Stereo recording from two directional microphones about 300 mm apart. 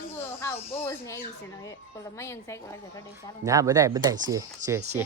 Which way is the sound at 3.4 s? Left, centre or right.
Centre.